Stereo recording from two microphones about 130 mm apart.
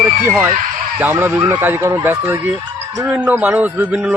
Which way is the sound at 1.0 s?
15° right (ahead or behind).